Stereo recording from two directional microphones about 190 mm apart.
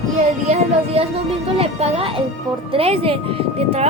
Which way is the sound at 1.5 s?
30° right (ahead or behind).